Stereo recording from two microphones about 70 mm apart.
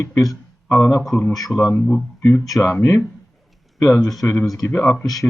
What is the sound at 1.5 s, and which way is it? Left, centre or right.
Speech, centre.